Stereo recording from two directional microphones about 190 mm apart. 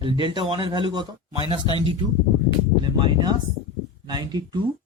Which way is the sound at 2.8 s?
25° right (ahead or behind).